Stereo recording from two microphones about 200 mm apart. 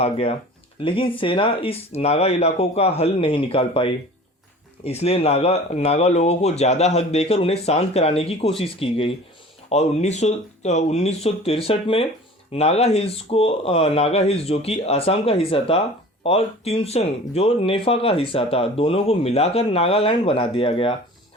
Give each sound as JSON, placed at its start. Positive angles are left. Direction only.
{"t": 0.0, "sound": "speech", "side_deg": 30}